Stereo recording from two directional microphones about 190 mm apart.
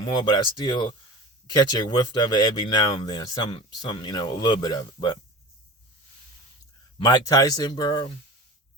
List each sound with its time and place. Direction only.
0.0 s speech: 25° left (ahead or behind)
7.0 s speech: 20° left (ahead or behind)